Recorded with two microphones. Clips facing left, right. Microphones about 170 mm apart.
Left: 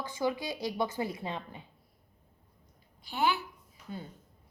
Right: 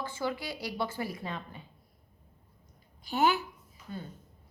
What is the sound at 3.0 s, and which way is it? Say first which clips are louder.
Speech: right 3 dB; 45° right (ahead or behind).